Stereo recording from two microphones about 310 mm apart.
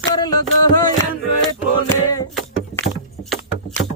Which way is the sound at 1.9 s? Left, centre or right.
Centre.